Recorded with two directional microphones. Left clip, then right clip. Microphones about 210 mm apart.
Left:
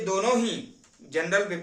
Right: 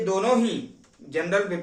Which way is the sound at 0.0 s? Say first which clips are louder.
Right 2 dB; 20° left (ahead or behind).